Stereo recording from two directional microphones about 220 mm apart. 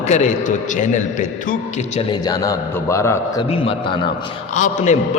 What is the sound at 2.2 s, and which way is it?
A man's voice, 15° left (ahead or behind).